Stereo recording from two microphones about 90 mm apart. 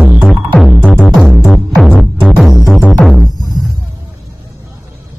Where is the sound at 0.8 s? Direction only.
15° left (ahead or behind).